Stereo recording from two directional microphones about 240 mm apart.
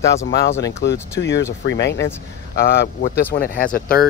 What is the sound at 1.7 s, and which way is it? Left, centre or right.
Speech, left.